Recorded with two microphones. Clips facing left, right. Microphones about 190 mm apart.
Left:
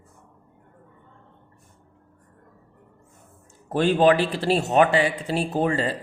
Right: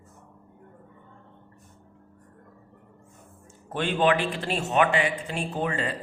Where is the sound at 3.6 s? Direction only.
40° left (ahead or behind).